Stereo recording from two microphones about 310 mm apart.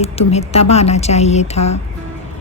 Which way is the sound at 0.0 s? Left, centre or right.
Centre.